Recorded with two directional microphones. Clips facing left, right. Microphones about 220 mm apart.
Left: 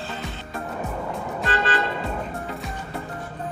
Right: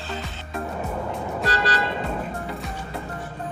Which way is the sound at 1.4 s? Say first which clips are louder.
Left 1 dB; 40° right (ahead or behind).